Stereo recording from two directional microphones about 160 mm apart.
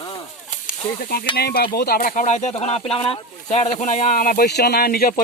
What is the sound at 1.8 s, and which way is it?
Speech, 70° left (ahead or behind).